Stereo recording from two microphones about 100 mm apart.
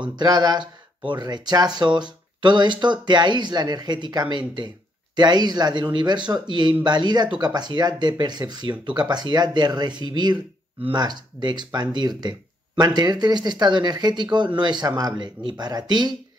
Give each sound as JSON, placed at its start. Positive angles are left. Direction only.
{"t": 0.1, "sound": "speech", "side_deg": -45}